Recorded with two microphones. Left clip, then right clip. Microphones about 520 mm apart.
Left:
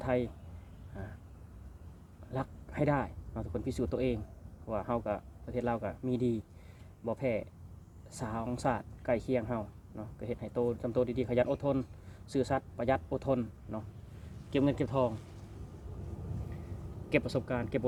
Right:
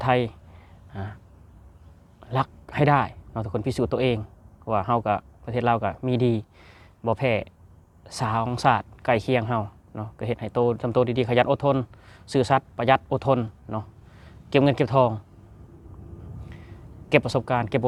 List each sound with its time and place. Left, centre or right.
0.0 s speech: right
2.3 s speech: right
17.1 s speech: right